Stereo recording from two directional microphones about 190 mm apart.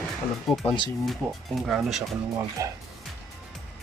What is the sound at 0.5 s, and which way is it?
Speech, centre (ahead or behind).